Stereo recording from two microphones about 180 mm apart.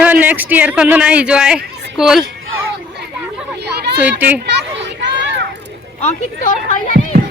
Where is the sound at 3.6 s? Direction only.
65° right (ahead or behind).